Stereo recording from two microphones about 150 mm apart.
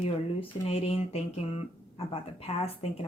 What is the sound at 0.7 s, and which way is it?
Speech, 40° left (ahead or behind).